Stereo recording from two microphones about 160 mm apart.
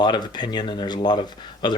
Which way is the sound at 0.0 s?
25° left (ahead or behind).